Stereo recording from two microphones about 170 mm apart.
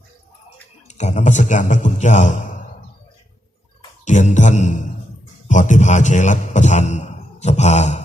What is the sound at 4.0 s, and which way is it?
A man's voice, 45° left (ahead or behind).